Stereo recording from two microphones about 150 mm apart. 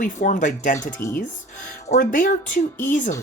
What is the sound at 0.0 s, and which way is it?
Speech, 55° left (ahead or behind).